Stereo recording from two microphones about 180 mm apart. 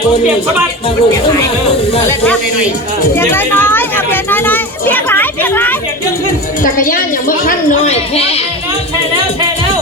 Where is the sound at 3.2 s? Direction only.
10° left (ahead or behind).